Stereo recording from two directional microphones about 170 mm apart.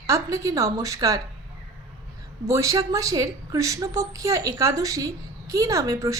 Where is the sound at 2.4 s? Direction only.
20° right (ahead or behind).